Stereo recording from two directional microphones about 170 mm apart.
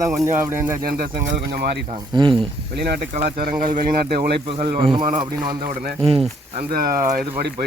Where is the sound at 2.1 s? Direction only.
25° right (ahead or behind).